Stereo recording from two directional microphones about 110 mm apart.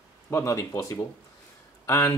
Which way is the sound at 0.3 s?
25° left (ahead or behind).